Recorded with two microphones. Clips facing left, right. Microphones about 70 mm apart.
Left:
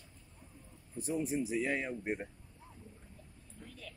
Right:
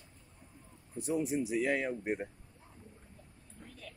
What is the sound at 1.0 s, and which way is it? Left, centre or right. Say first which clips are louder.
Speech: right 2 dB; right.